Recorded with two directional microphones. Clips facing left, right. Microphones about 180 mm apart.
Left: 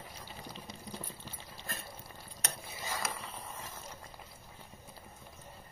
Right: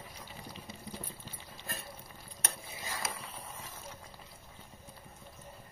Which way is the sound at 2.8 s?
Centre (ahead or behind).